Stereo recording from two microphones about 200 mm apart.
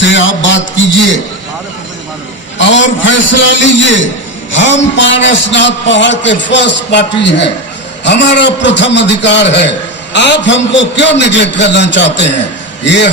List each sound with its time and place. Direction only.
0.0 s a man's voice: 65° left (ahead or behind)
2.6 s a man's voice: 65° left (ahead or behind)